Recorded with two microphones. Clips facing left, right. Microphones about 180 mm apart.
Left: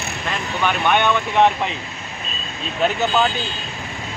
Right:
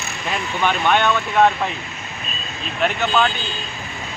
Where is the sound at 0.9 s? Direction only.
15° left (ahead or behind).